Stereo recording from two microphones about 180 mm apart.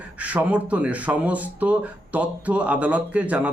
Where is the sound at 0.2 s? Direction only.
10° right (ahead or behind).